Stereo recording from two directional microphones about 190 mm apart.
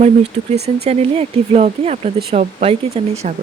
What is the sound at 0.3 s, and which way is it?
Speech, 35° right (ahead or behind).